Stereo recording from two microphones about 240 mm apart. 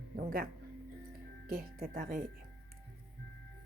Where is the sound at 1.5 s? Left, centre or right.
Right.